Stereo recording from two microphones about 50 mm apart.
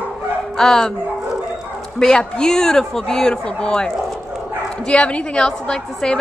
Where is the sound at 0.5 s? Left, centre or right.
Centre.